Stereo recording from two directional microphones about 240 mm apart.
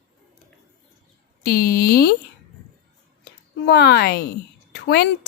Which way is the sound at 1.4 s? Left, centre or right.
Left.